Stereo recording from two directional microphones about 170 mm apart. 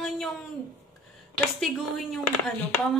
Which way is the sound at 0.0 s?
Centre (ahead or behind).